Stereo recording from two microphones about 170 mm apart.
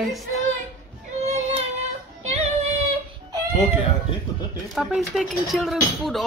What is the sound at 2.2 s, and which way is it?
Child singing, 40° right (ahead or behind).